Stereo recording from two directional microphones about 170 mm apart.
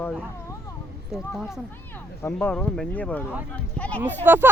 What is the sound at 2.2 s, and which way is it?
Speech, 10° left (ahead or behind).